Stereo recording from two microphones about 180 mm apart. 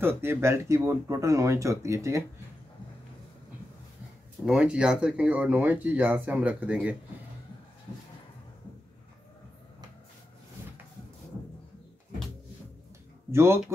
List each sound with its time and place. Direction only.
0.0 s speech: 10° right (ahead or behind)
4.5 s speech: 5° right (ahead or behind)
13.3 s speech: 15° right (ahead or behind)